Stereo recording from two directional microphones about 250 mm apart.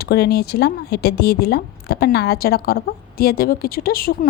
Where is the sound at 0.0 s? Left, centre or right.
Left.